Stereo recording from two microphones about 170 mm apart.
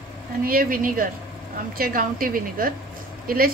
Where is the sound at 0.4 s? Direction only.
60° right (ahead or behind).